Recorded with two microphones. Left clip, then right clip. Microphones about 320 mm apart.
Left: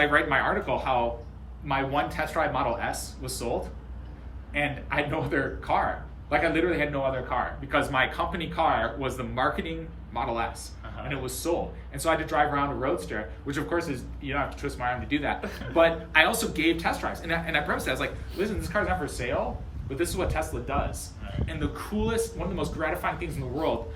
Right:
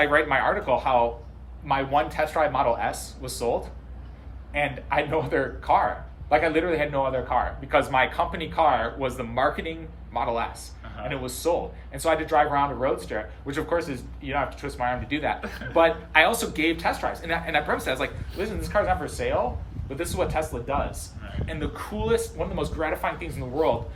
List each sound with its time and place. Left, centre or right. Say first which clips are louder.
0.0 s a man's voice: right 2 dB; centre
4.5 s a man's voice: right 3 dB; centre
15.4 s speech: even; centre
15.7 s a man's voice: right 2 dB; centre